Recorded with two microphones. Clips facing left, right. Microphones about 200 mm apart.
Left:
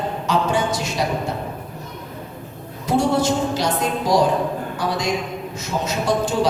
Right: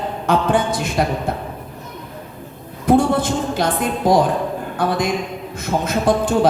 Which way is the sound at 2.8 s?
55° right (ahead or behind).